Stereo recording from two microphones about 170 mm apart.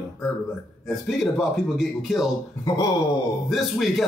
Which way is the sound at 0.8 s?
Centre (ahead or behind).